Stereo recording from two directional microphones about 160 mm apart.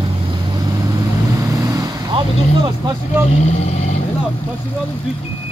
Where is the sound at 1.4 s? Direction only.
20° right (ahead or behind).